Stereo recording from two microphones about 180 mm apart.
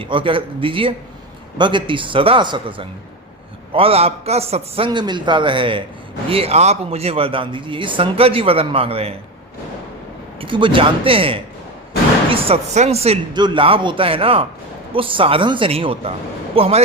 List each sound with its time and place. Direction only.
0.0 s a man's voice: 30° right (ahead or behind)
10.4 s a man's voice: 30° right (ahead or behind)